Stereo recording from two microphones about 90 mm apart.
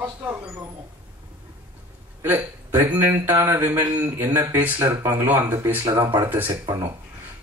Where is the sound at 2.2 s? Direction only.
25° right (ahead or behind).